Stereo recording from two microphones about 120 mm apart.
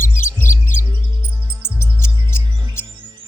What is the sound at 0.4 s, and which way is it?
Music, 90° left.